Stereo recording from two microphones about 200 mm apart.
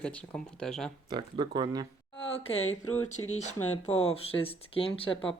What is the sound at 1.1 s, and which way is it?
Speech, 20° right (ahead or behind).